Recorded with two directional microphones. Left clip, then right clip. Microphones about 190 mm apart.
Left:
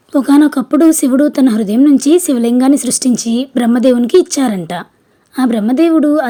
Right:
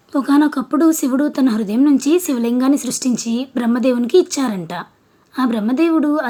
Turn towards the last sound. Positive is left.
turn(degrees=25)  # may be behind; listen again after turning